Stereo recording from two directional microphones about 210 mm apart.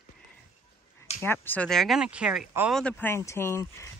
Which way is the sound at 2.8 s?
10° left (ahead or behind).